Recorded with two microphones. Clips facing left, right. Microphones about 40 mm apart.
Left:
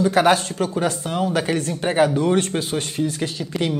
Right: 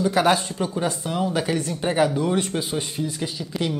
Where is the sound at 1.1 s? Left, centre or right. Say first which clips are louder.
Left 1 dB; left.